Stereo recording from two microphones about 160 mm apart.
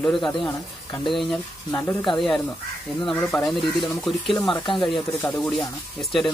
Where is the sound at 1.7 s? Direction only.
20° left (ahead or behind).